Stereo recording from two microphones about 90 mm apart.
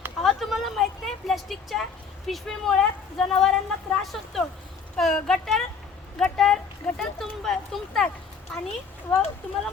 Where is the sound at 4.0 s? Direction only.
Centre (ahead or behind).